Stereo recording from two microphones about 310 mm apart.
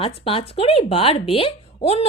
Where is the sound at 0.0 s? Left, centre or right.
Centre.